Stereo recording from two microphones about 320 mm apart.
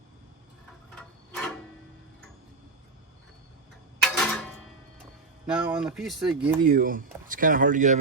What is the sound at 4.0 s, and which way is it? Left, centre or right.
Music, centre.